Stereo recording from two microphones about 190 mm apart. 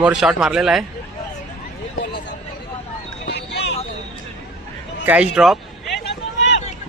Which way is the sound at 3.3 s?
65° left (ahead or behind).